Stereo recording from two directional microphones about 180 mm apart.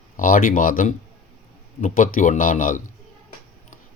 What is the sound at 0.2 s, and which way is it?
Speech, 50° left (ahead or behind).